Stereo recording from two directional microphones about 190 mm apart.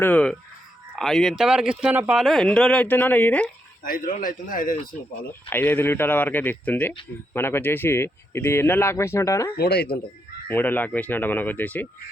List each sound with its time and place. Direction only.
0.0 s speech: 5° left (ahead or behind)
3.8 s a man's voice: 45° left (ahead or behind)
5.5 s speech: 10° left (ahead or behind)
9.6 s speech: 55° left (ahead or behind)
10.5 s speech: 10° left (ahead or behind)